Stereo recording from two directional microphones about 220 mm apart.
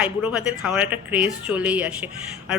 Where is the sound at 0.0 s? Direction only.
5° right (ahead or behind).